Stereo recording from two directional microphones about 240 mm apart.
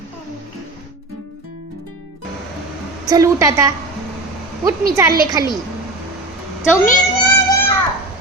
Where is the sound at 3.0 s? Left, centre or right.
Centre.